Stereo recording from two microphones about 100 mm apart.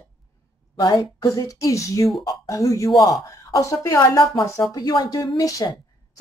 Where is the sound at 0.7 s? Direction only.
45° left (ahead or behind).